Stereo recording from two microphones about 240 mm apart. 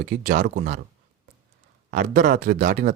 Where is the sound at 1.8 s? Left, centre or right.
Right.